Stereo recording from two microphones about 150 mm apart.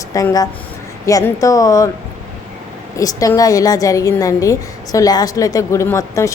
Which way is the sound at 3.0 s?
25° left (ahead or behind).